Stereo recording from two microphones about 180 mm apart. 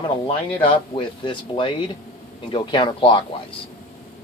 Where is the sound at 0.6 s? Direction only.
30° left (ahead or behind).